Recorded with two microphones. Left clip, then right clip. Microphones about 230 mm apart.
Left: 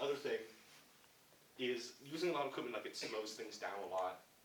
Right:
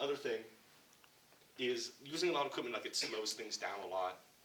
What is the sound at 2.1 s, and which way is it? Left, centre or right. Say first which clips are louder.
Speech: right 3 dB; right.